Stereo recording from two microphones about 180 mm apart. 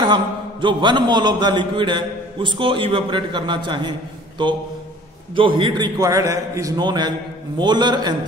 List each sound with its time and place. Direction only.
0.0 s a man's voice: 25° right (ahead or behind)
5.3 s a man's voice: 25° right (ahead or behind)